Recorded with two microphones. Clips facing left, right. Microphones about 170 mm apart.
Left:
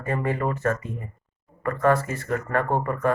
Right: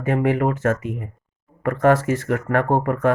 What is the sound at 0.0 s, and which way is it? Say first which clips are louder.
Speech: right 6 dB; 90° right.